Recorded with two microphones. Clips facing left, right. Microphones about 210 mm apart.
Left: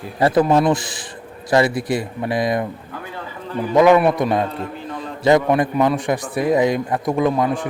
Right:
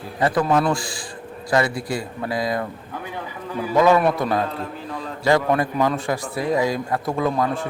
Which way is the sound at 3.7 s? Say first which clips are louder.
Left 4 dB; 15° left (ahead or behind).